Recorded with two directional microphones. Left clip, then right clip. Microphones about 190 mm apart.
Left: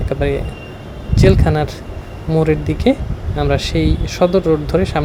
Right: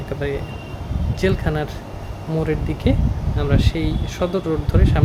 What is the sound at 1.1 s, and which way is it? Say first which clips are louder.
Speech: left 7 dB; 30° left (ahead or behind).